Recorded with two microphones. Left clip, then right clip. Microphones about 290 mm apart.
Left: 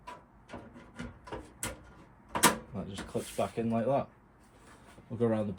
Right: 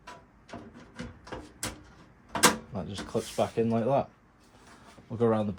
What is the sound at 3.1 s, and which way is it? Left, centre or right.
Speech, right.